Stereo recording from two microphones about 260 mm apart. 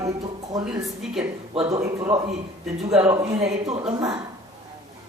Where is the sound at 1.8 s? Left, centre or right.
Centre.